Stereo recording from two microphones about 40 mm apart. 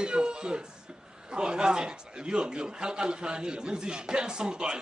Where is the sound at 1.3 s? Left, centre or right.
Right.